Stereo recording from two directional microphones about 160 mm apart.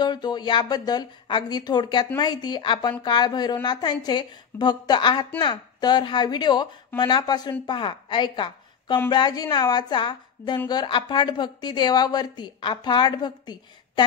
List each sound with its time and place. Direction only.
0.0 s a woman's voice: 25° left (ahead or behind)